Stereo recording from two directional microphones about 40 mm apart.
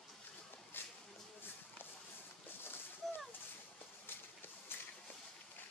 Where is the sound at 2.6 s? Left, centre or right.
Left.